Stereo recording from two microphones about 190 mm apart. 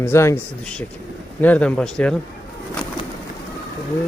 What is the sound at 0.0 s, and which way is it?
Speech, 15° left (ahead or behind).